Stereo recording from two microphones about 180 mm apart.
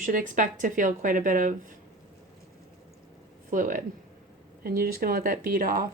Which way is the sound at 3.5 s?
45° right (ahead or behind).